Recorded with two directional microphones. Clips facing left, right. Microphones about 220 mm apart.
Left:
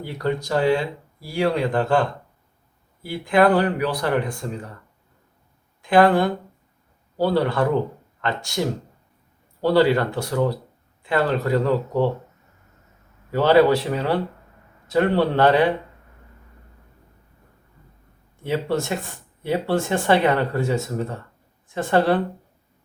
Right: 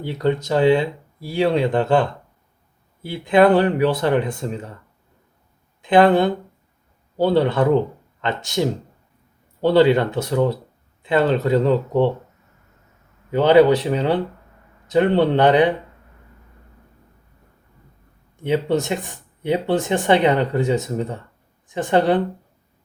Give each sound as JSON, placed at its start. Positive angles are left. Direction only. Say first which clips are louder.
{"t": 0.0, "sound": "speech", "louder": "right 4 dB", "side_deg": -20}
{"t": 5.8, "sound": "speech", "louder": "right 2 dB", "side_deg": -20}
{"t": 13.3, "sound": "speech", "louder": "right 3 dB", "side_deg": -20}
{"t": 18.4, "sound": "speech", "louder": "right 4 dB", "side_deg": -20}